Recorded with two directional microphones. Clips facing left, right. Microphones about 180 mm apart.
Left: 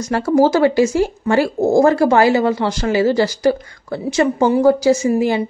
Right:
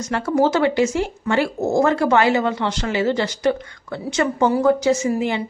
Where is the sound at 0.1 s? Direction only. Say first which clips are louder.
Left 4 dB; 35° left (ahead or behind).